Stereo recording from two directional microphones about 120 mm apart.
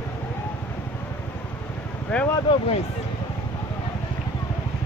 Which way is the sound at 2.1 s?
10° left (ahead or behind).